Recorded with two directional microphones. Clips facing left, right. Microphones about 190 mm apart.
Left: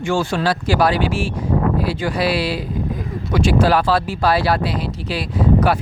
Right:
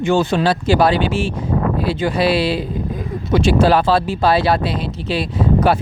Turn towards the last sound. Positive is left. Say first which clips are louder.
# right 1 dB
turn(degrees=-25)  # may be behind; listen again after turning